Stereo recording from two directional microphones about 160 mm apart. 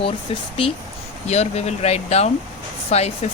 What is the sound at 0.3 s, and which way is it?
Speech, 35° left (ahead or behind).